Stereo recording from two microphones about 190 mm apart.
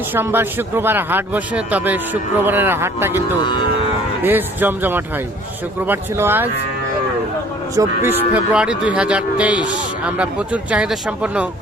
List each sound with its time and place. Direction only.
0.1 s a man's voice: 10° right (ahead or behind)
3.4 s speech: 25° left (ahead or behind)
4.2 s a man's voice: 10° right (ahead or behind)
7.8 s a man's voice: 10° right (ahead or behind)